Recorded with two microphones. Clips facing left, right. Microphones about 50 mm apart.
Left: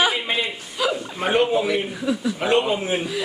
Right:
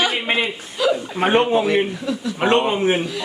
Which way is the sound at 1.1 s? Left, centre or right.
Right.